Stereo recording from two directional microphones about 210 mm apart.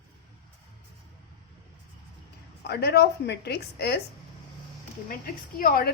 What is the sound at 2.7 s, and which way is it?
A woman's voice, 50° left (ahead or behind).